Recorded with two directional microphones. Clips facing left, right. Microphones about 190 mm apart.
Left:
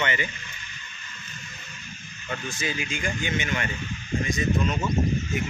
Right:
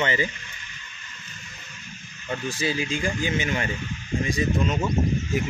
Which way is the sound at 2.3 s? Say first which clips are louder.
Right 4 dB; 35° right (ahead or behind).